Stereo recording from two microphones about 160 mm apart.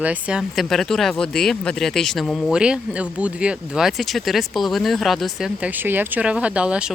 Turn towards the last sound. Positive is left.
turn(degrees=-5)  # may be behind; listen again after turning